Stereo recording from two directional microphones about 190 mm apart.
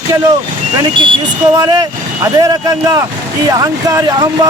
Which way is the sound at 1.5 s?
15° right (ahead or behind).